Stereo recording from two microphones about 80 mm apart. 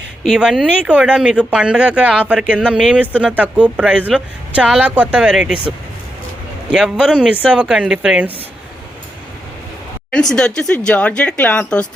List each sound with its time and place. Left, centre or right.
0.3 s speech: centre
6.7 s speech: centre
10.1 s speech: centre